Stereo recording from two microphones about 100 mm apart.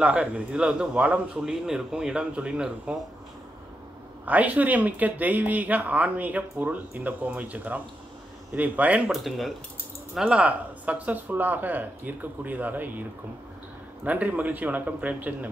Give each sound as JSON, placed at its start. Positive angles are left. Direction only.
{"t": 0.0, "sound": "speech", "side_deg": -10}
{"t": 4.3, "sound": "speech", "side_deg": -15}
{"t": 9.1, "sound": "speech", "side_deg": 0}
{"t": 10.1, "sound": "speech", "side_deg": -10}
{"t": 14.0, "sound": "speech", "side_deg": -15}